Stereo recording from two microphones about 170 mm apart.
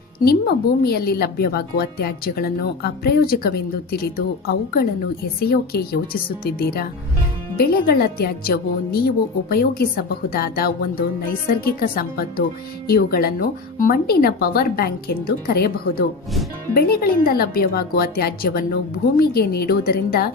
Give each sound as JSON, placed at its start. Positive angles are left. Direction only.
{"t": 0.3, "sound": "a woman's voice", "side_deg": 65}